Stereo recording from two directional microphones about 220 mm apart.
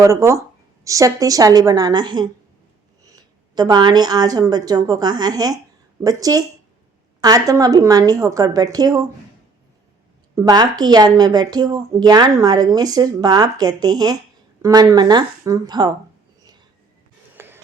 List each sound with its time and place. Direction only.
0.0 s speech: 15° right (ahead or behind)
3.5 s speech: 20° right (ahead or behind)
10.3 s speech: 15° right (ahead or behind)
17.3 s music: 10° right (ahead or behind)